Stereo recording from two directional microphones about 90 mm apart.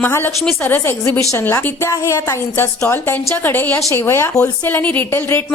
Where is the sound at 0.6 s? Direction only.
25° left (ahead or behind).